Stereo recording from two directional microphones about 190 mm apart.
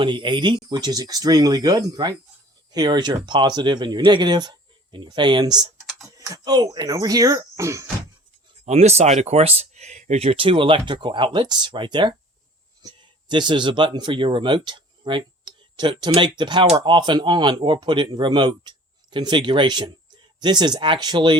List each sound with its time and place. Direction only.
0.0 s speech: 25° right (ahead or behind)
8.6 s speech: 35° right (ahead or behind)